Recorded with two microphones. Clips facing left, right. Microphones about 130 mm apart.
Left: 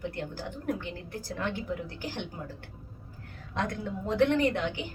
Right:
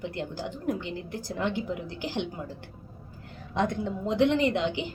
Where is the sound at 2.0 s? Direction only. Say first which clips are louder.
Right 5 dB; 20° right (ahead or behind).